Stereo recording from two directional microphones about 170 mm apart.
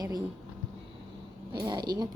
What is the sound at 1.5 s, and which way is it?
Speech, 25° right (ahead or behind).